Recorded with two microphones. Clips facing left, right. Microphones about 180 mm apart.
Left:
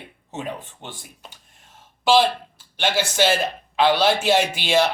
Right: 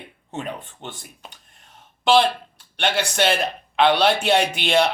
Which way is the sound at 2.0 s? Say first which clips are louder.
Even; 5° left (ahead or behind).